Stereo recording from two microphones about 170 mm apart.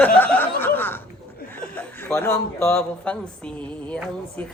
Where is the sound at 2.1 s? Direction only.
15° left (ahead or behind).